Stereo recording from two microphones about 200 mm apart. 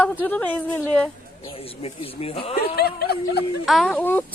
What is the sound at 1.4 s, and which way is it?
Speech, 30° left (ahead or behind).